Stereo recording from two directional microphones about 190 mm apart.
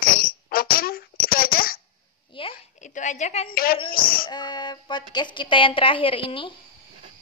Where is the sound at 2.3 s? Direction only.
30° left (ahead or behind); by 3.8 s 50° left (ahead or behind).